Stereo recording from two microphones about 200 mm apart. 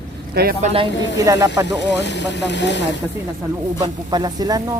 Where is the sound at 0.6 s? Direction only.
35° right (ahead or behind).